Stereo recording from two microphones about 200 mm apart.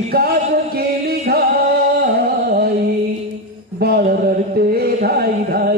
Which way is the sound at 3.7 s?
50° right (ahead or behind).